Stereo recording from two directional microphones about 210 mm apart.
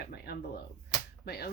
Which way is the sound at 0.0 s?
50° left (ahead or behind).